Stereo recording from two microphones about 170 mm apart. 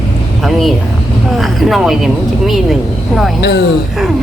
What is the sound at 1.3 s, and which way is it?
A woman's voice, centre (ahead or behind).